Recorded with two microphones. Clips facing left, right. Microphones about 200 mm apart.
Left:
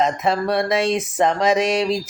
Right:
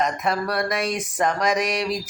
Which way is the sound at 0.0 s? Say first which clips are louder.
Left 4 dB; 25° left (ahead or behind).